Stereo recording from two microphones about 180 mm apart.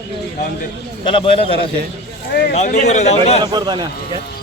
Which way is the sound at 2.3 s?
65° left (ahead or behind).